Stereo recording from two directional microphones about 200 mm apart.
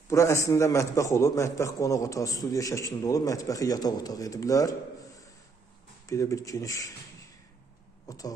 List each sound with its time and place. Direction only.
0.1 s a man's voice: 15° left (ahead or behind)
6.0 s a man's voice: 15° left (ahead or behind)
8.1 s throat clearing: 15° left (ahead or behind)